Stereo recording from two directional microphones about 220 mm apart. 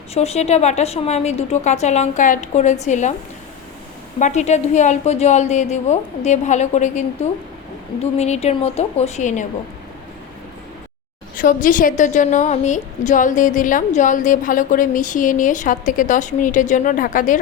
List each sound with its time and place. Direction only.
0.1 s a woman's voice: 30° left (ahead or behind)
4.2 s a woman's voice: 30° left (ahead or behind)
11.3 s a woman's voice: 40° left (ahead or behind)